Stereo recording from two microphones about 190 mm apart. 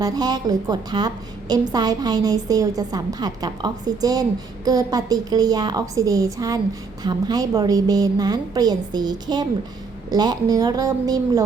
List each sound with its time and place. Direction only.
0.0 s a woman's voice: 20° right (ahead or behind)